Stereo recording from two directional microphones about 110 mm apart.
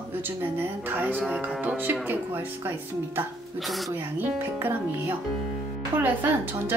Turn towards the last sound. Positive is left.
turn(degrees=-20)  # may be behind; listen again after turning